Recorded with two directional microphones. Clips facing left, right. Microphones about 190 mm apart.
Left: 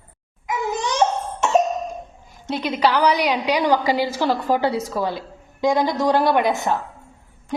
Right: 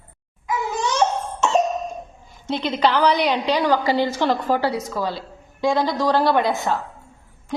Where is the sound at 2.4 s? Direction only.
5° left (ahead or behind).